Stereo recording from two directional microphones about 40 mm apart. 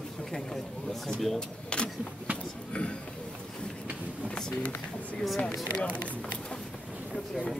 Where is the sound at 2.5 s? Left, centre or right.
Left.